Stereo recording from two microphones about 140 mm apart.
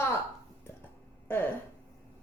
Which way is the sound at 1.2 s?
15° left (ahead or behind).